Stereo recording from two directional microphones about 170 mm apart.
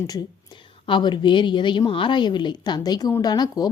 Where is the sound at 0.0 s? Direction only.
25° left (ahead or behind).